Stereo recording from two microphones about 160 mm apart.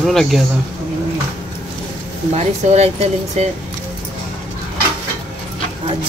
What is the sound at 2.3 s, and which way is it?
Speech, 45° right (ahead or behind).